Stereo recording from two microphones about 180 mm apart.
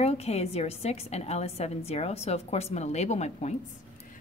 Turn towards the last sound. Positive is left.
turn(degrees=40)  # may be behind; listen again after turning